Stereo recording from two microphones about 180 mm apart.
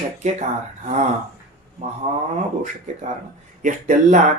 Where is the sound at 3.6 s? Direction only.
45° right (ahead or behind).